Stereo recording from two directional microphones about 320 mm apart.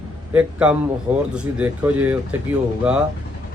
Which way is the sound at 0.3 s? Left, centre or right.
Centre.